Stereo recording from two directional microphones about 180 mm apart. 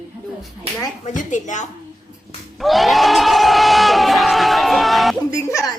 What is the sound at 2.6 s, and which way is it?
Crowd, centre (ahead or behind).